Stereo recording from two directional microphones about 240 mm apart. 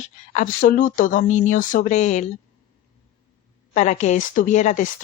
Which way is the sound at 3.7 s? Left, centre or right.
Left.